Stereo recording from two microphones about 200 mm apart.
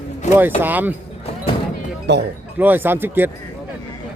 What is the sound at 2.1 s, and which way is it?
Speech, 60° right (ahead or behind).